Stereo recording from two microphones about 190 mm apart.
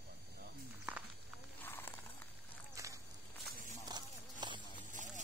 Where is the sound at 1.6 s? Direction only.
10° left (ahead or behind).